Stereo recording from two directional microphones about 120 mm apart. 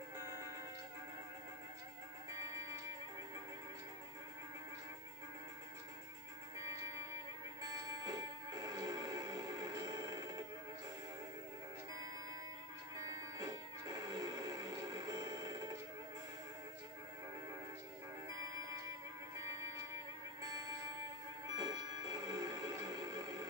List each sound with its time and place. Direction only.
7.6 s music: 35° right (ahead or behind)
13.0 s music: 30° right (ahead or behind)
20.4 s music: 35° right (ahead or behind)